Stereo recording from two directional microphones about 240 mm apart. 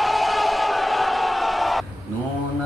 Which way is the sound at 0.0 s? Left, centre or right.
Centre.